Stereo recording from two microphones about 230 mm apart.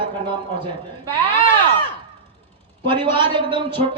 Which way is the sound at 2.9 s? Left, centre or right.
Right.